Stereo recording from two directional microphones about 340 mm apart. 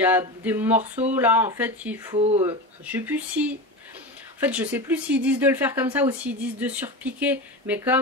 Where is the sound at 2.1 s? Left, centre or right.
Centre.